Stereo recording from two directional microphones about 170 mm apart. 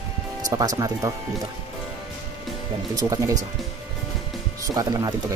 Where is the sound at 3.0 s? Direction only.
20° right (ahead or behind).